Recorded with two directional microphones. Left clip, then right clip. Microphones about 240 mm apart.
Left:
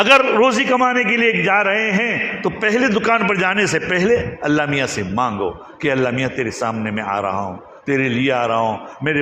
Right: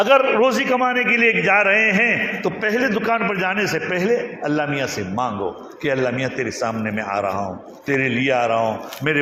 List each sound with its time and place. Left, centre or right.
0.0 s a man's voice: left